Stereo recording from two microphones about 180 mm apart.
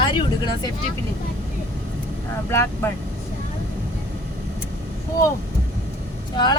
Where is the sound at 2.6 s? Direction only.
15° left (ahead or behind).